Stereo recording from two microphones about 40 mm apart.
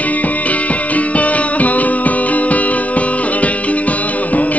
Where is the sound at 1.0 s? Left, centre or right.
Left.